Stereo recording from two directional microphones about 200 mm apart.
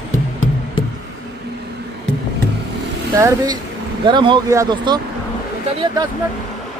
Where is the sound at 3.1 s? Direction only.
15° right (ahead or behind).